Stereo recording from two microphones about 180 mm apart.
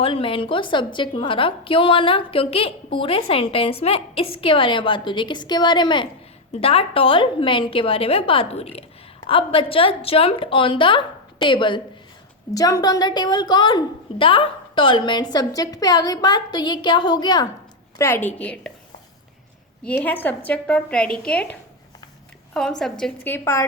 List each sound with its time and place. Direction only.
0.0 s a woman's voice: 30° left (ahead or behind); by 18.7 s 5° left (ahead or behind)
19.8 s a woman's voice: 10° left (ahead or behind)
22.8 s a woman's voice: 5° left (ahead or behind)